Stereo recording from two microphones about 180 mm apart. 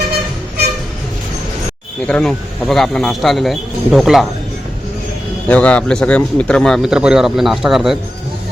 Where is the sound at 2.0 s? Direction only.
5° left (ahead or behind).